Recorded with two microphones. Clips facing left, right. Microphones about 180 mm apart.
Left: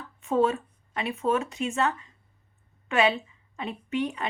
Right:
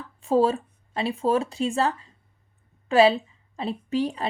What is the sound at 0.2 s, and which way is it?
A woman's voice, 30° right (ahead or behind).